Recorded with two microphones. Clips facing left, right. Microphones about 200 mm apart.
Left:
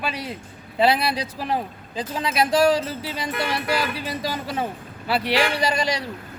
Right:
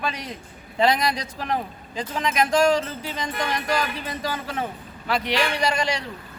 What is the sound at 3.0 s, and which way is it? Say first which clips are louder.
Speech: left 1 dB; 10° left (ahead or behind).